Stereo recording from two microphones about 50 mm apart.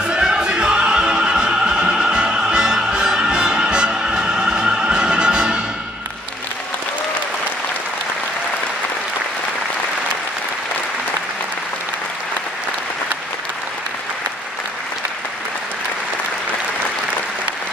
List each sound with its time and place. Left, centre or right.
0.1 s music: centre